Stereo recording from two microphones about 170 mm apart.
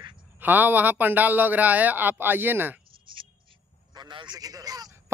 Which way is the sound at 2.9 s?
30° right (ahead or behind).